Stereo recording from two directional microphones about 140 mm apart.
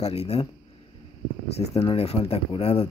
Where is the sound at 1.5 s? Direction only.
45° left (ahead or behind).